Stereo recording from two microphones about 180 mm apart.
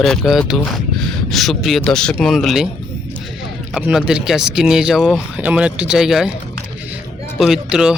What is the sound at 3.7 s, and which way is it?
Speech, 5° right (ahead or behind).